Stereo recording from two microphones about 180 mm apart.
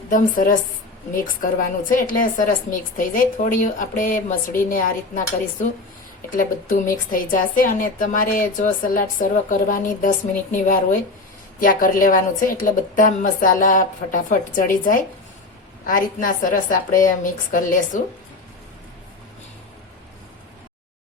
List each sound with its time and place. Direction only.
0.1 s a woman's voice: 50° left (ahead or behind)
6.3 s a woman's voice: 50° left (ahead or behind)